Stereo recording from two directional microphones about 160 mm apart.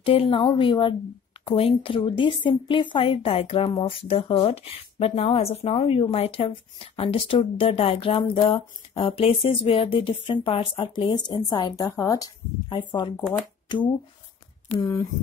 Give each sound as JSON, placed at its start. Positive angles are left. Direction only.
{"t": 0.0, "sound": "a woman's voice", "side_deg": 35}